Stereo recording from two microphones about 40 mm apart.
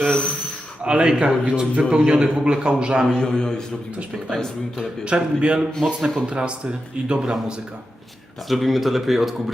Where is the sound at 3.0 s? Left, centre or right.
Centre.